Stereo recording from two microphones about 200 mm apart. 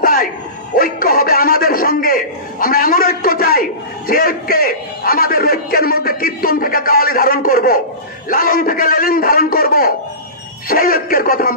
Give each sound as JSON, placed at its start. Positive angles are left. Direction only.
{"t": 0.0, "sound": "bow-wow", "side_deg": 45}
{"t": 0.7, "sound": "chuckle", "side_deg": 45}
{"t": 4.1, "sound": "music", "side_deg": 45}
{"t": 8.3, "sound": "a sound", "side_deg": 45}
{"t": 10.7, "sound": "speech", "side_deg": 45}